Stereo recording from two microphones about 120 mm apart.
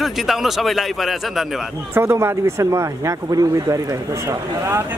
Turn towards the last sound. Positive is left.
turn(degrees=-25)  # may be behind; listen again after turning